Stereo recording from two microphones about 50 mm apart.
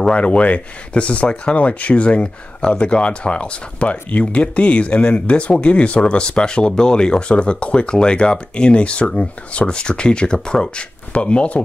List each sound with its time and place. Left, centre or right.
0.0 s speech: left